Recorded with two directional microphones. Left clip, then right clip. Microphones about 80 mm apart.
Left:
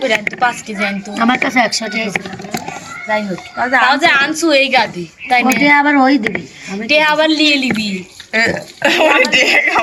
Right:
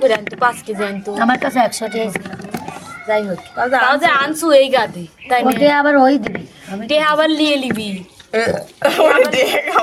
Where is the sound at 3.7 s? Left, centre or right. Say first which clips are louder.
Left 2 dB; right.